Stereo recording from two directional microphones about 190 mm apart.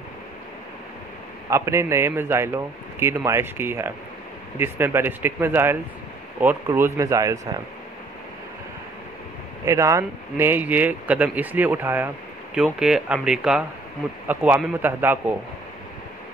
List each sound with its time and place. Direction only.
1.5 s a man's voice: 15° right (ahead or behind)
9.7 s a man's voice: 15° right (ahead or behind)